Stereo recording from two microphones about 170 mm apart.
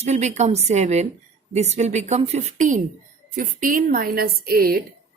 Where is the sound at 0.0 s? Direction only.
40° right (ahead or behind).